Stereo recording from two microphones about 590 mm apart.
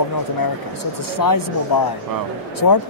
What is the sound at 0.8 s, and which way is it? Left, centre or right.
Speech, left.